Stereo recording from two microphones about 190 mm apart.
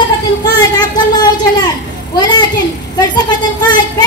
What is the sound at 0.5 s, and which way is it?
A woman's voice, 20° left (ahead or behind).